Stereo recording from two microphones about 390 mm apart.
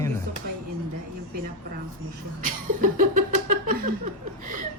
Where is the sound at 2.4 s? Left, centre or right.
Centre.